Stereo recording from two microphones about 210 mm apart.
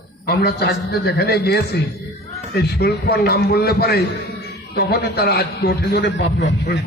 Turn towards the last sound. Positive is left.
turn(degrees=55)  # may be behind; listen again after turning